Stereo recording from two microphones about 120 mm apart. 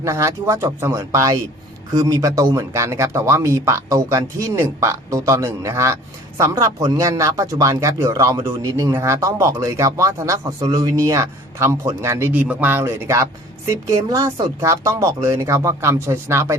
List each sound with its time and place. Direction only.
0.0 s speech: 25° right (ahead or behind)